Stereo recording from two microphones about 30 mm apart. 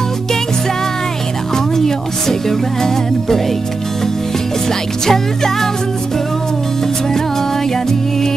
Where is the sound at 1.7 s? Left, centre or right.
Centre.